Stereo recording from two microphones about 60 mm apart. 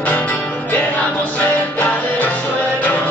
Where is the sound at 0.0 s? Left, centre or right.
Left.